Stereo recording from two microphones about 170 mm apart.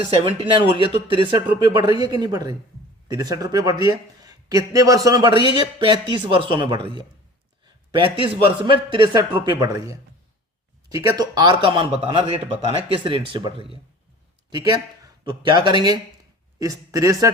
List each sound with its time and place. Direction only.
0.3 s speech: 35° right (ahead or behind)
5.3 s speech: 30° left (ahead or behind)
5.5 s speech: 30° right (ahead or behind)
7.9 s speech: 30° right (ahead or behind)
10.9 s a man's voice: 20° right (ahead or behind)